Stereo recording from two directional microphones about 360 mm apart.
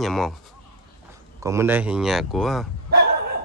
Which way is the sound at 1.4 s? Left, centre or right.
Centre.